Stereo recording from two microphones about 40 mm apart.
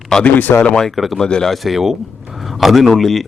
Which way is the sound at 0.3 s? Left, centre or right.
Left.